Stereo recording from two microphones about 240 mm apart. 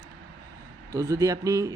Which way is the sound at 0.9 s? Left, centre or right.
Centre.